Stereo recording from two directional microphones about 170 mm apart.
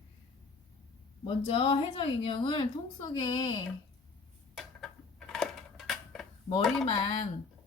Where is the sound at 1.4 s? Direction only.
35° left (ahead or behind).